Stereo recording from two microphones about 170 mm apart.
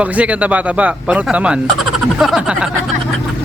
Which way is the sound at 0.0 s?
10° right (ahead or behind).